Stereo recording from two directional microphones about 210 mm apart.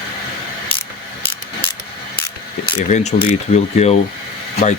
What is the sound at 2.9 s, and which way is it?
Speech, 35° left (ahead or behind).